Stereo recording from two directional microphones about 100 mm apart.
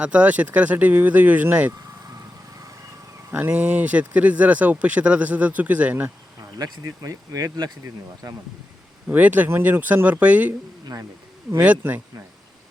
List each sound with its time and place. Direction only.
0.0 s speech: 10° right (ahead or behind)
3.3 s speech: 15° right (ahead or behind)
6.6 s speech: 35° right (ahead or behind)
9.0 s speech: 15° right (ahead or behind)
11.6 s speech: 15° right (ahead or behind)